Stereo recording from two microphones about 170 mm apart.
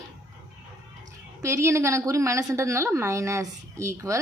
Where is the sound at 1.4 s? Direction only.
15° right (ahead or behind).